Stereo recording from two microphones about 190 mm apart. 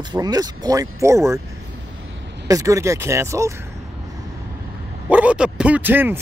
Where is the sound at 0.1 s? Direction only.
20° right (ahead or behind).